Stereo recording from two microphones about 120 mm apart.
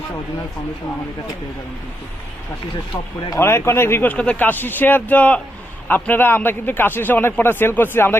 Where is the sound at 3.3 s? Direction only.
20° left (ahead or behind).